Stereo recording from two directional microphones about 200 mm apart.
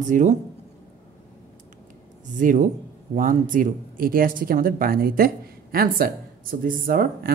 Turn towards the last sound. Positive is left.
turn(degrees=-50)  # may be behind; listen again after turning